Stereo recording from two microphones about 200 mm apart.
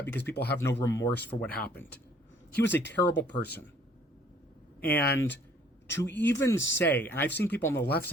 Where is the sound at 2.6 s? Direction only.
60° left (ahead or behind).